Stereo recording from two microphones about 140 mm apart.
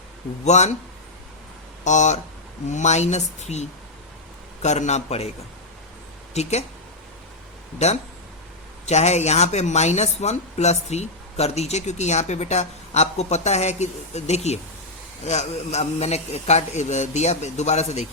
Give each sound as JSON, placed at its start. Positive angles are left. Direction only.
{"t": 0.4, "sound": "speech", "side_deg": 55}
{"t": 1.8, "sound": "speech", "side_deg": 55}
{"t": 6.3, "sound": "speech", "side_deg": 50}
{"t": 7.8, "sound": "speech", "side_deg": 50}